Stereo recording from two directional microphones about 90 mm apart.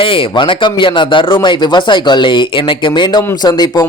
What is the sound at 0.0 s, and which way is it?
Speech, 75° left (ahead or behind).